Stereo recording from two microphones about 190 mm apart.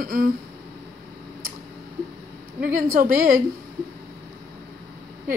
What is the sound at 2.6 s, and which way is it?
Speech, 45° right (ahead or behind).